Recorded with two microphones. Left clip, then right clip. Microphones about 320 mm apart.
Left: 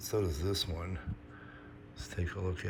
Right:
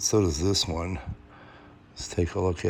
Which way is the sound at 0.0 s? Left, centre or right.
Centre.